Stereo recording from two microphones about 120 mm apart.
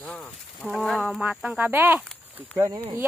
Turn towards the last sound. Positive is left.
turn(degrees=-25)  # may be behind; listen again after turning